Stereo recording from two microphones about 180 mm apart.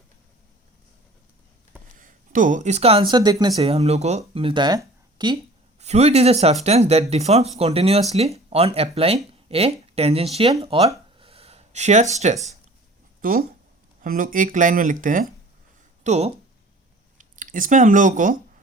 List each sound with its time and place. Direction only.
2.0 s speech: 50° right (ahead or behind); by 3.6 s 20° right (ahead or behind)
3.6 s speech: 35° right (ahead or behind)
4.4 s speech: 25° right (ahead or behind)
5.8 s speech: 35° right (ahead or behind)
11.2 s a sound: 30° right (ahead or behind)
13.2 s speech: 50° right (ahead or behind)
16.0 s speech: 35° right (ahead or behind)